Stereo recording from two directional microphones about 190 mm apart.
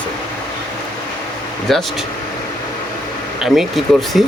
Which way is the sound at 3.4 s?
Centre (ahead or behind).